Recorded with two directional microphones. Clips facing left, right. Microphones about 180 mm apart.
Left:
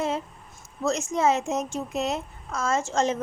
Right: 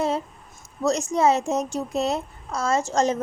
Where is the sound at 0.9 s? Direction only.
35° right (ahead or behind).